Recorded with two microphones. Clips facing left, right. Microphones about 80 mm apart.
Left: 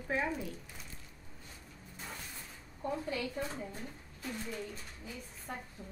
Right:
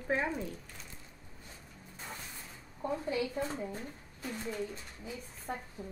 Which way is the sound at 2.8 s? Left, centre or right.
Centre.